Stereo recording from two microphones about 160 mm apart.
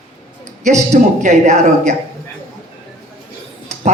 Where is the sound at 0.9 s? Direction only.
45° right (ahead or behind).